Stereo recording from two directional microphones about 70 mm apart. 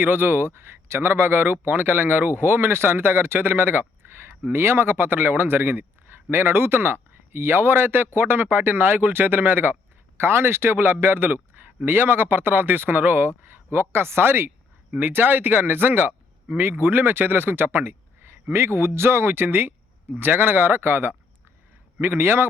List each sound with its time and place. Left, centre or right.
0.0 s speech: right